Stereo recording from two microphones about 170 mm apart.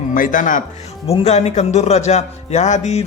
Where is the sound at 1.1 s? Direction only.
35° left (ahead or behind).